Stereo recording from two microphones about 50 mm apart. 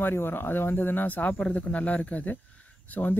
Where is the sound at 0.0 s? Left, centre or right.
Left.